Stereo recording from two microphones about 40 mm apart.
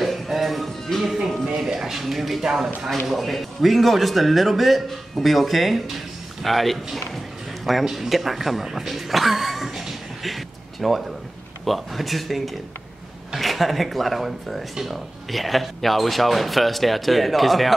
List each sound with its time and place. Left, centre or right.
0.0 s music: centre
1.0 s speech: centre